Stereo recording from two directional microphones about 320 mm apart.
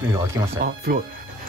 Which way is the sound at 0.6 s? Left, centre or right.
Right.